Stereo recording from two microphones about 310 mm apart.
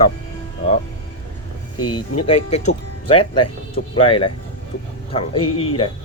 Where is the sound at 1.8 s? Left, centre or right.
Centre.